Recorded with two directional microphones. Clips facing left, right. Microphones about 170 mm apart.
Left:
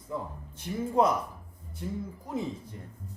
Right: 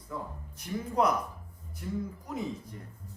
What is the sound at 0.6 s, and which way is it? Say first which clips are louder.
Speech: left 3 dB; 25° left (ahead or behind).